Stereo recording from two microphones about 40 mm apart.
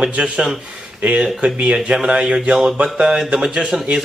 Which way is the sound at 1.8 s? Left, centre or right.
Right.